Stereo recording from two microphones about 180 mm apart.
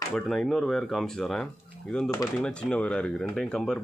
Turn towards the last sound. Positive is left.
turn(degrees=5)  # may be behind; listen again after turning